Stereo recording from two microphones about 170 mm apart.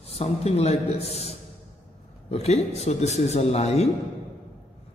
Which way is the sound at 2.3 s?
40° left (ahead or behind).